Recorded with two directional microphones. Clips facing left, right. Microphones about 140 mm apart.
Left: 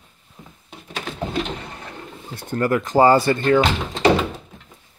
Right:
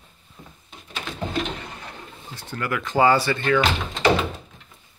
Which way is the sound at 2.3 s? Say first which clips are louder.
Left 8 dB; 45° left (ahead or behind).